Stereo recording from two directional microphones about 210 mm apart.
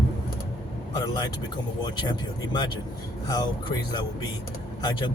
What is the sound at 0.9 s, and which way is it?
Speech, 20° left (ahead or behind).